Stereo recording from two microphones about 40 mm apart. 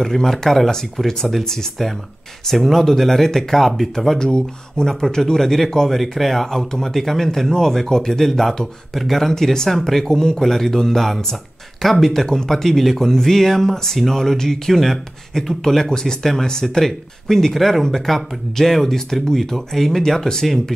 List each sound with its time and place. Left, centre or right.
0.0 s speech: centre